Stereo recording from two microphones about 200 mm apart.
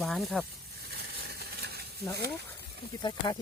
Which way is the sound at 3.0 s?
20° left (ahead or behind).